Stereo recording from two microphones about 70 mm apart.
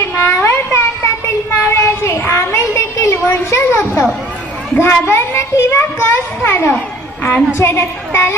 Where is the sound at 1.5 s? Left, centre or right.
Left.